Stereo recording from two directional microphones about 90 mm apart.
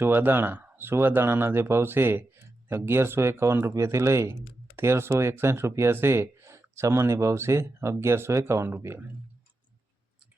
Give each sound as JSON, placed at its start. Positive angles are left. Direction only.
{"t": 0.0, "sound": "speech", "side_deg": -25}